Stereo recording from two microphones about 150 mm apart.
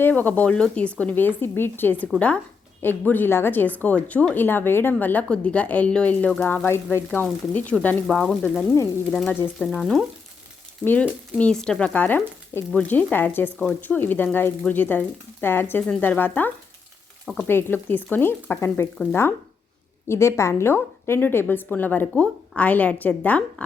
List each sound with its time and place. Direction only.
0.0 s speech: 10° left (ahead or behind)
8.4 s speech: 15° left (ahead or behind)
9.6 s frying: 5° left (ahead or behind)
11.3 s speech: 5° left (ahead or behind)
20.1 s speech: 20° left (ahead or behind)